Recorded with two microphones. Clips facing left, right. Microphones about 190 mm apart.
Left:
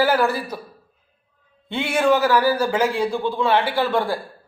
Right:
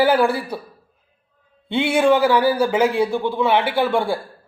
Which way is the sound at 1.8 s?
10° right (ahead or behind).